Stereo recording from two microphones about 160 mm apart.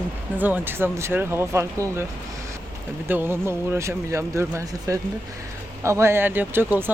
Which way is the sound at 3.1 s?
15° right (ahead or behind).